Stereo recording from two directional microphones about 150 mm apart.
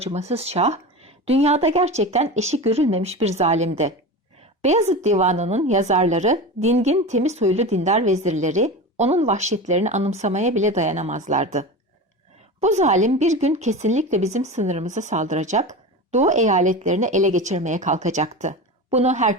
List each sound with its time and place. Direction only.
0.0 s a woman's voice: 45° right (ahead or behind)